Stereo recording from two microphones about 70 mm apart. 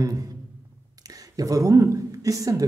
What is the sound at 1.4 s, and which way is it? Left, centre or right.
Speech, right.